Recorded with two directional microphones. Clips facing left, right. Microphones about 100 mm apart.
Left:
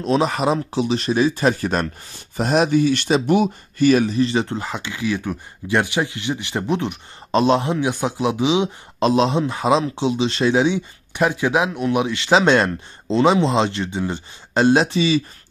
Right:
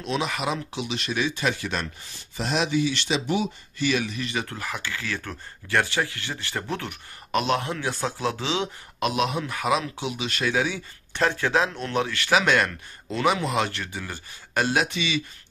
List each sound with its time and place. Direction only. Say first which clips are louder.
0.0 s speech: left 8 dB; 35° left (ahead or behind); by 8.6 s 15° left (ahead or behind)
9.0 s speech: left 8 dB; 30° left (ahead or behind)